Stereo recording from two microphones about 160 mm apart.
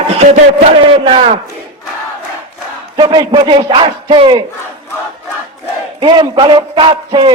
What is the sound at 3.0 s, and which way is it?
A man's voice, 25° right (ahead or behind).